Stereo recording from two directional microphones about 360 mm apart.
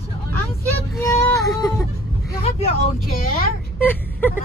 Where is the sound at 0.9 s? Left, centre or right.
Centre.